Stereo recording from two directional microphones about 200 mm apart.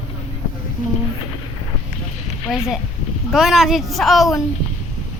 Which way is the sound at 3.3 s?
Centre (ahead or behind).